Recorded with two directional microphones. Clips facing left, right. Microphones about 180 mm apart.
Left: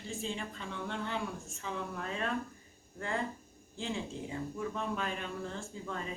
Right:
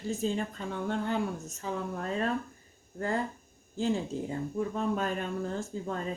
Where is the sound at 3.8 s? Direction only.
40° right (ahead or behind).